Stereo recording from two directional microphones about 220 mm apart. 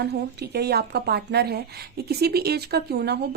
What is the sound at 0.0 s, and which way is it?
A woman's voice, 45° right (ahead or behind).